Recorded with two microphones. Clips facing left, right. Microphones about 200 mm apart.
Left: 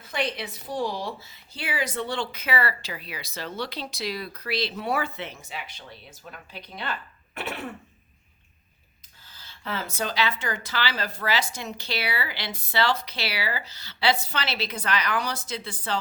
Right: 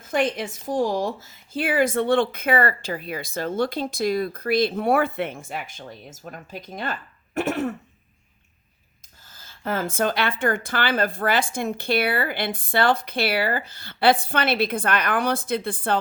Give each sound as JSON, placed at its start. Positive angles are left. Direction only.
{"t": 0.0, "sound": "a woman's voice", "side_deg": -45}
{"t": 9.2, "sound": "a woman's voice", "side_deg": -45}